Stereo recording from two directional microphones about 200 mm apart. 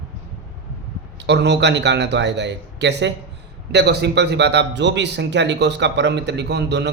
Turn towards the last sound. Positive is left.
turn(degrees=-60)  # may be behind; listen again after turning